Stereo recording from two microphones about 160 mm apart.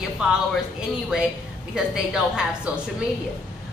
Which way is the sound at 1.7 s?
5° right (ahead or behind).